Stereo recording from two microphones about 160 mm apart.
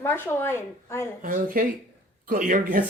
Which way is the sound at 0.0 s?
15° left (ahead or behind).